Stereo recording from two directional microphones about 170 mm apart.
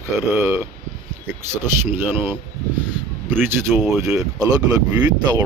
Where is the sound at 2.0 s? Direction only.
15° right (ahead or behind).